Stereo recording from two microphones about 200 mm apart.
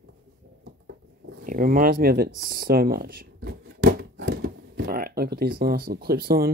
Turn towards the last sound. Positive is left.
turn(degrees=-50)  # may be behind; listen again after turning